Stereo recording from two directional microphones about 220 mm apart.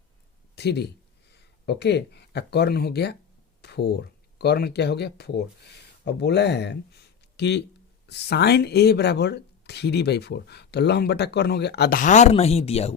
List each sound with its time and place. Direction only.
0.5 s speech: 50° left (ahead or behind); by 12.9 s 30° left (ahead or behind)